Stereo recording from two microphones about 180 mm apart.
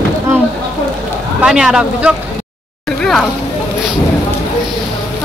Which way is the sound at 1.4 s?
5° right (ahead or behind).